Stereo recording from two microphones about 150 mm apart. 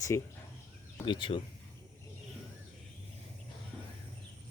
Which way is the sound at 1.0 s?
35° left (ahead or behind).